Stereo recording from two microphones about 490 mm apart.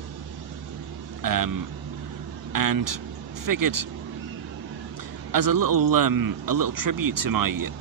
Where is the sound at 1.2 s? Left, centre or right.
Right.